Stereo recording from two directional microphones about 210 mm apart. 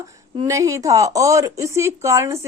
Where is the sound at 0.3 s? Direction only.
15° right (ahead or behind).